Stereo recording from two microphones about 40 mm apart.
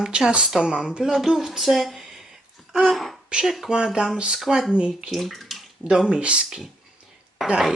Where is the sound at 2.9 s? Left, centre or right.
Centre.